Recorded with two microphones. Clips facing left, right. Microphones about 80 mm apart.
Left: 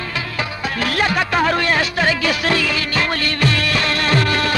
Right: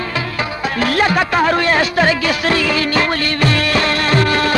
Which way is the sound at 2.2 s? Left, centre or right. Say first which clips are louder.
Right 2 dB; right.